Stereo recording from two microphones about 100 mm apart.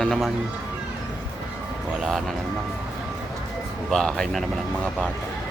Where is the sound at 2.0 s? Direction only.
5° right (ahead or behind).